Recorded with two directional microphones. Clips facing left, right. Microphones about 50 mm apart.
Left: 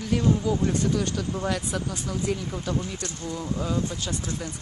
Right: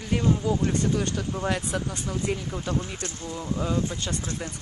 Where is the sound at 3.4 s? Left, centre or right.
Centre.